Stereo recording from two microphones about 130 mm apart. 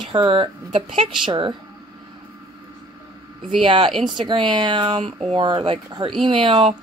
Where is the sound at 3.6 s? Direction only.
40° right (ahead or behind).